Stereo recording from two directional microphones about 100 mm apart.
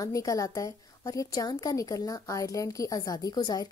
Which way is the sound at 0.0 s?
35° left (ahead or behind).